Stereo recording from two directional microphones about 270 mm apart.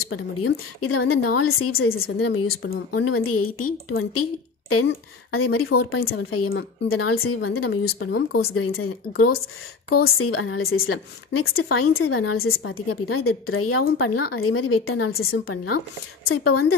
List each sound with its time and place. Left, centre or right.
0.1 s a woman's voice: left
3.1 s a woman's voice: left
4.6 s a woman's voice: left
7.6 s speech: left
8.5 s a woman's voice: left
10.0 s a woman's voice: left